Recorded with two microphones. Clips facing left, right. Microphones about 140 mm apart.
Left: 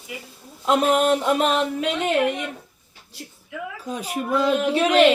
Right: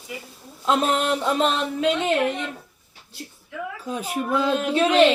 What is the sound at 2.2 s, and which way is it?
Speech, 5° left (ahead or behind).